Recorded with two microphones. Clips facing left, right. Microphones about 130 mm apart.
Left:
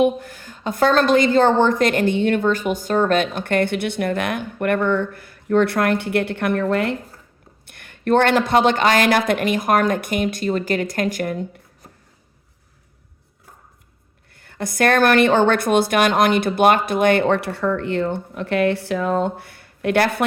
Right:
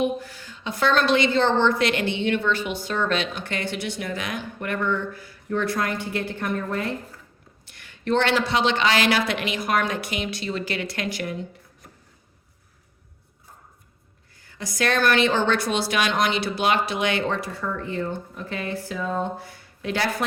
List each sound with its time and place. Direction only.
0.0 s a woman's voice: 50° left (ahead or behind); by 6.9 s 75° left (ahead or behind)
7.6 s a woman's voice: 55° left (ahead or behind)
14.3 s a woman's voice: 60° left (ahead or behind)